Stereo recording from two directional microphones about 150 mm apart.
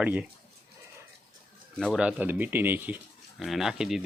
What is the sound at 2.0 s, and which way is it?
Speech, 10° right (ahead or behind).